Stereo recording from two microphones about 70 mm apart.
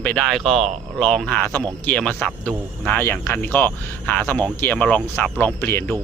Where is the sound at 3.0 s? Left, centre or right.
Left.